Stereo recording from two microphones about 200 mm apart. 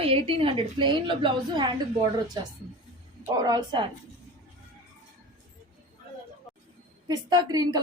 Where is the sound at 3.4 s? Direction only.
20° right (ahead or behind).